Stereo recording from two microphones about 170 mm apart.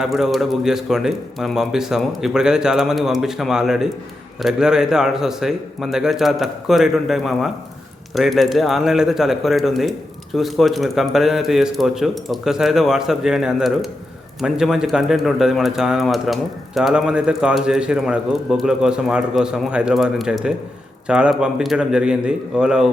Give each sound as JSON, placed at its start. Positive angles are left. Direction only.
{"t": 0.0, "sound": "speech", "side_deg": 0}